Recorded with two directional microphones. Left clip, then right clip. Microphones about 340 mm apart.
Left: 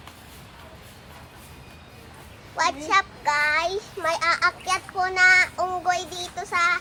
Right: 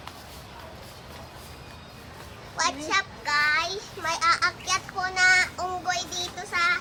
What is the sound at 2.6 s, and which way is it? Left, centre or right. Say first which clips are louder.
A child's voice: left 4 dB; centre.